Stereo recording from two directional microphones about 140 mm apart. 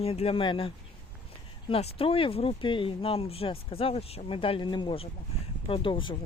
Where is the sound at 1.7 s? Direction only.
45° left (ahead or behind).